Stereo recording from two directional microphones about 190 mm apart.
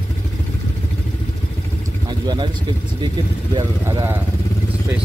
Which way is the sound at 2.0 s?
25° right (ahead or behind).